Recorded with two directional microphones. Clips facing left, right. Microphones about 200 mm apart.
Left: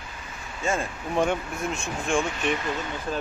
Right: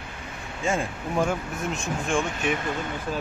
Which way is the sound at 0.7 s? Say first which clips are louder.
Right 1 dB; 10° right (ahead or behind).